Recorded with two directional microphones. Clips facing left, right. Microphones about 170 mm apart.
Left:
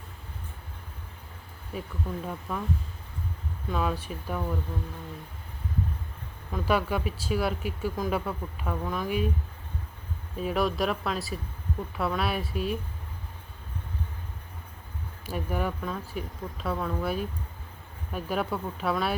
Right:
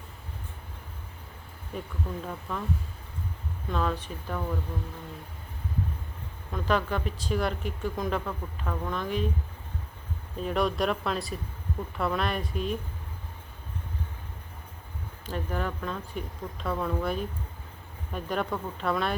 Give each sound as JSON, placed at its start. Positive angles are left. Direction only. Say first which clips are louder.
{"t": 1.7, "sound": "speech", "louder": "left 1 dB", "side_deg": 5}
{"t": 3.7, "sound": "speech", "louder": "even", "side_deg": 10}
{"t": 6.5, "sound": "speech", "louder": "left 1 dB", "side_deg": 10}
{"t": 10.3, "sound": "speech", "louder": "even", "side_deg": 5}
{"t": 15.3, "sound": "speech", "louder": "left 1 dB", "side_deg": 10}